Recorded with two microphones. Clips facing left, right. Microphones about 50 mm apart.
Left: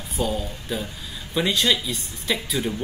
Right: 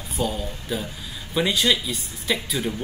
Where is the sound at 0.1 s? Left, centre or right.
Centre.